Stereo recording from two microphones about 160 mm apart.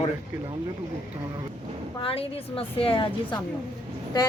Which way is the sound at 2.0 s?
35° left (ahead or behind).